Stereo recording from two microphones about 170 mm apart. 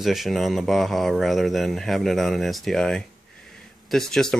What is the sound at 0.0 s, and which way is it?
Speech, centre (ahead or behind).